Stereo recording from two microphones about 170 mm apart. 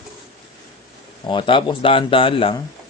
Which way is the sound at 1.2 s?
30° left (ahead or behind).